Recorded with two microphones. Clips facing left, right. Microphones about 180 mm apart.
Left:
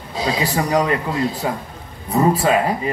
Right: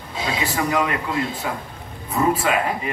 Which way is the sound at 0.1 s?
35° left (ahead or behind).